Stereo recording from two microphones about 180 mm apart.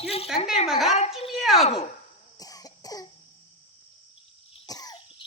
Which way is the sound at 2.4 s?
20° left (ahead or behind).